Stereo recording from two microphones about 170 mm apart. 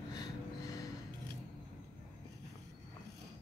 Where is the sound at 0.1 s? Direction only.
20° left (ahead or behind).